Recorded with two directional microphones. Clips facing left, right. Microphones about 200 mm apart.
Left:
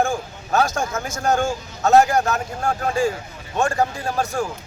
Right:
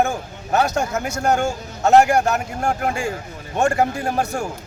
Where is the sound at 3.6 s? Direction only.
20° right (ahead or behind).